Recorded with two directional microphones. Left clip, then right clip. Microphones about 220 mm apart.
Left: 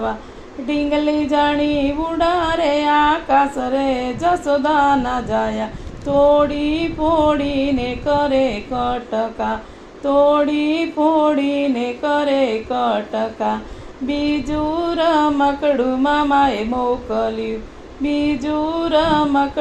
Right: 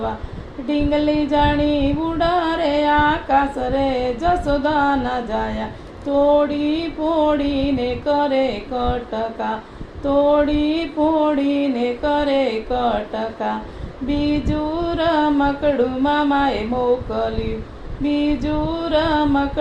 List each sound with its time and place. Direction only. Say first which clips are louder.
0.7 s music: even; 30° left (ahead or behind)
14.1 s female singing: even; 30° left (ahead or behind)
14.9 s music: left 2 dB; 30° left (ahead or behind)